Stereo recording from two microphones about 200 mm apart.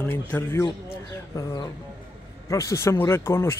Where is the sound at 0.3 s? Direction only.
10° left (ahead or behind).